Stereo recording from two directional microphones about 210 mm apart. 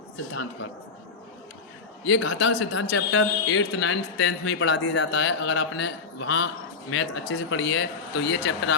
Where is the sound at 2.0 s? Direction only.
65° left (ahead or behind).